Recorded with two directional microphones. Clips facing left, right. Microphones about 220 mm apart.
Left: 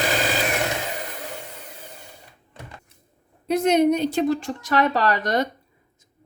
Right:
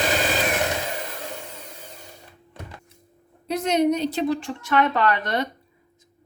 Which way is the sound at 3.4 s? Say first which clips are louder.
Left 3 dB; 50° left (ahead or behind).